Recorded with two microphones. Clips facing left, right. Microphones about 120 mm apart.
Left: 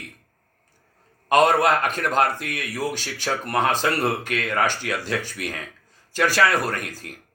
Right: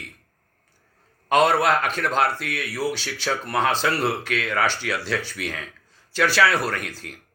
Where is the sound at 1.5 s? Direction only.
50° left (ahead or behind).